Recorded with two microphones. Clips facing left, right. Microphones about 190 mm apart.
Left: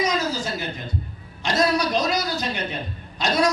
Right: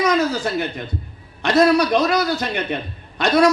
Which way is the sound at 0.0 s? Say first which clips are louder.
Right 5 dB; 60° right (ahead or behind).